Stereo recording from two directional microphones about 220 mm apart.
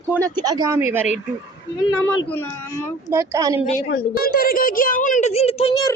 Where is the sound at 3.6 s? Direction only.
30° left (ahead or behind).